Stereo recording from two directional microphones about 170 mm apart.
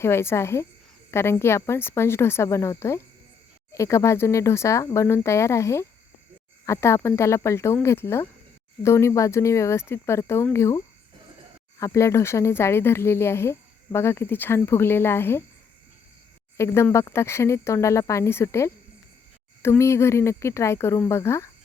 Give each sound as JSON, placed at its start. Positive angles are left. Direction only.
{"t": 0.0, "sound": "speech", "side_deg": 15}
{"t": 16.6, "sound": "speech", "side_deg": 15}